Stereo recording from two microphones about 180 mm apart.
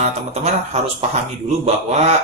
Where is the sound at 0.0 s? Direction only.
35° right (ahead or behind).